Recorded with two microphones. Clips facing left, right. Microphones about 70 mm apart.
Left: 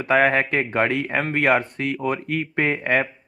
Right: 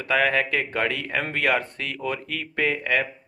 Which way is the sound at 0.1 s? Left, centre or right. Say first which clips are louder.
Left 4 dB; left.